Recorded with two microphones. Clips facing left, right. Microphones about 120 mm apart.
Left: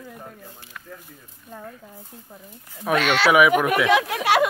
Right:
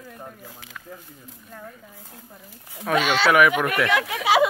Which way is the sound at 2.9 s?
Centre (ahead or behind).